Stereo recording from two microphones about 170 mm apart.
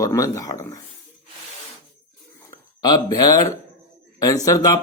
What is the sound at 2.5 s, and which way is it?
Speech, 20° left (ahead or behind).